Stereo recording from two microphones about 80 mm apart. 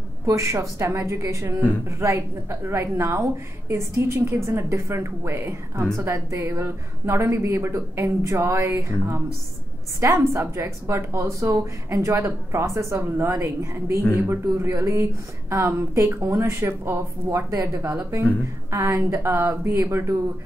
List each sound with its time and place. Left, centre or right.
0.3 s a woman's voice: right